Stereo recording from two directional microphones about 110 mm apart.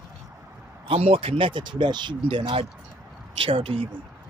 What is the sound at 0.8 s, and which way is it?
Speech, 60° right (ahead or behind).